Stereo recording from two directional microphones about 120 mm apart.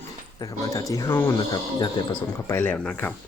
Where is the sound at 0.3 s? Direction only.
30° left (ahead or behind).